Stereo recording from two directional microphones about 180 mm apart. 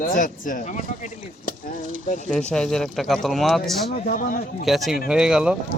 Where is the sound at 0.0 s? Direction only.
45° left (ahead or behind).